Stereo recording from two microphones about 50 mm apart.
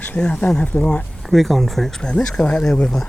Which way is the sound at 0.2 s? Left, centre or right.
Left.